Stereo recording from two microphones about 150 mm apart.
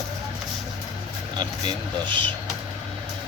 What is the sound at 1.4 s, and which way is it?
Speech, 30° right (ahead or behind).